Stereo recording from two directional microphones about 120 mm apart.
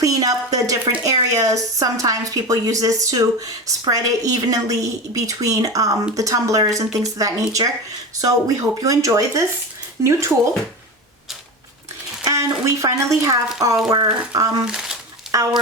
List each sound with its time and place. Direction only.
0.0 s speech: 30° right (ahead or behind)
12.2 s speech: 25° right (ahead or behind)
14.6 s speech: 5° right (ahead or behind)
15.3 s speech: 30° right (ahead or behind)